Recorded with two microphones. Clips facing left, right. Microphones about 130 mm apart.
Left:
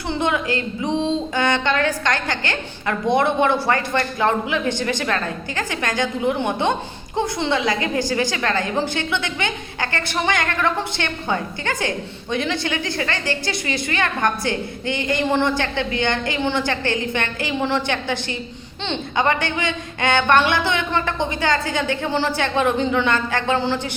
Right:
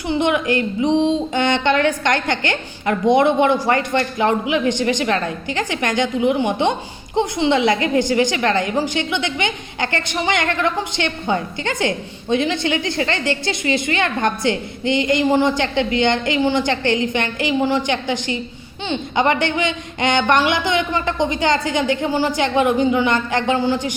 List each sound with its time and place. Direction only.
0.1 s a woman's voice: 20° right (ahead or behind)